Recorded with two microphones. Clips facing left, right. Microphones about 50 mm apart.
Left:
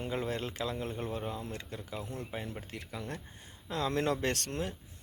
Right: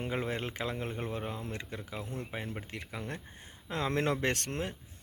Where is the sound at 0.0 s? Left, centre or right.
Right.